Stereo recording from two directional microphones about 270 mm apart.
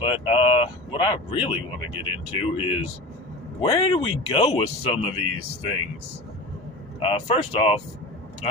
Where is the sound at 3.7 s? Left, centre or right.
Left.